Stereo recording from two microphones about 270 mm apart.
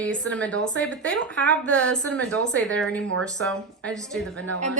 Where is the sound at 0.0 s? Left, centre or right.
Centre.